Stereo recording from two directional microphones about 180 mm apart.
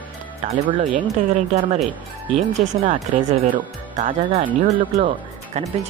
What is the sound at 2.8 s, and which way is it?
Speech, 40° right (ahead or behind).